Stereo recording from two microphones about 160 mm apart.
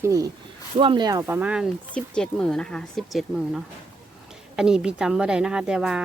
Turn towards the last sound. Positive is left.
turn(degrees=-5)  # may be behind; listen again after turning